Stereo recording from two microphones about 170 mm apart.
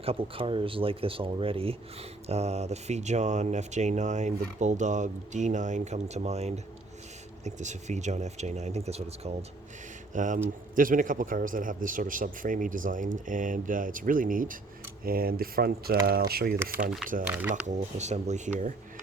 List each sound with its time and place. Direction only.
0.0 s a man's voice: 35° right (ahead or behind)
10.1 s a man's voice: 50° right (ahead or behind); by 16.6 s 65° right (ahead or behind)
17.2 s speech: 10° right (ahead or behind)
17.7 s a man's voice: 40° right (ahead or behind)